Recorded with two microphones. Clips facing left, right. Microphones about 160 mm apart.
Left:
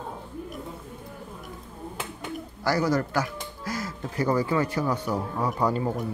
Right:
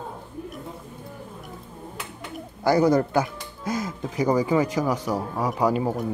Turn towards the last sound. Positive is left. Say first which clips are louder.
# right 3 dB
turn(degrees=-10)  # may be behind; listen again after turning